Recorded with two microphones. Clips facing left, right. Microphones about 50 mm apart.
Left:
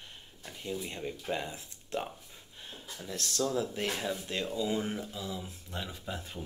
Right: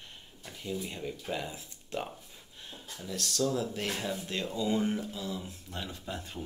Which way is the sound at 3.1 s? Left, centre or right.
Left.